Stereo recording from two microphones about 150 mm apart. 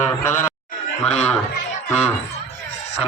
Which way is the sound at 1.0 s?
45° left (ahead or behind).